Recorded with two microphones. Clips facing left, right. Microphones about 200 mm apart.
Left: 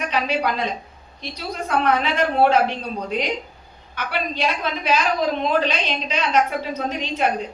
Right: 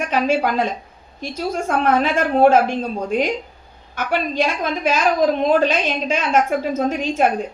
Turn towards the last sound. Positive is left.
turn(degrees=-45)  # may be behind; listen again after turning